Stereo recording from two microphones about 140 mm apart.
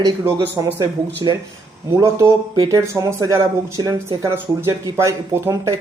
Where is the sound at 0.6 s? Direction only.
25° right (ahead or behind).